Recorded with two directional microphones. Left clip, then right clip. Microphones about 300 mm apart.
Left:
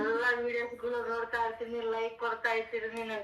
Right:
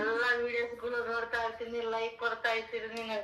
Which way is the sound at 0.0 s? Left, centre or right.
Centre.